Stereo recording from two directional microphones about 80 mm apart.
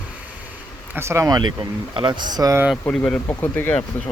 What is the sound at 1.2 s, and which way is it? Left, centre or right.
Speech, right.